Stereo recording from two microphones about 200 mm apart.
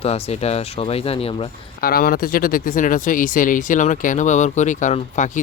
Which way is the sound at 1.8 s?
50° left (ahead or behind).